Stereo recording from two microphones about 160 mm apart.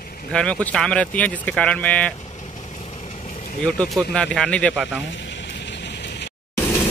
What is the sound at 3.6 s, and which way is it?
Speech, 5° left (ahead or behind).